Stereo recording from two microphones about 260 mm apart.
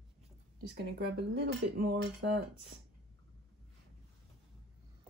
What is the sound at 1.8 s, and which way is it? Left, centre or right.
Cutlery, right.